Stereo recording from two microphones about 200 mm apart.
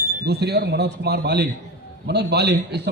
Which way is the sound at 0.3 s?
55° right (ahead or behind).